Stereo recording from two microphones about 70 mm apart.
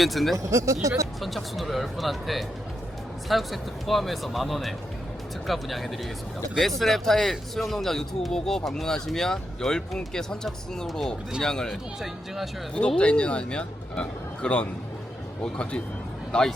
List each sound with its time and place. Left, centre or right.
0.0 s speech: centre
0.3 s speech: right
1.2 s speech: centre
11.7 s speech: centre
13.0 s speech: centre
16.3 s speech: centre